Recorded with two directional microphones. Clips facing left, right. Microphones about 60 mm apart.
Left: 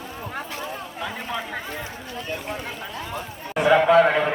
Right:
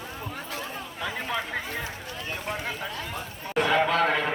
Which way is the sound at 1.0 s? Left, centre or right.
Centre.